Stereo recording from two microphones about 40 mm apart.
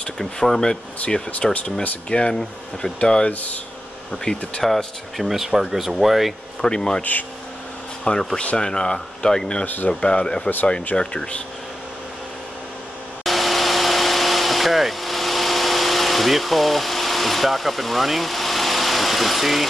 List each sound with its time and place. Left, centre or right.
0.2 s speech: centre
1.5 s speech: left
3.3 s speech: left
4.3 s speech: left
4.6 s speech: centre
6.6 s speech: centre
7.0 s speech: left
8.1 s speech: left
9.8 s speech: left
13.2 s a sound: centre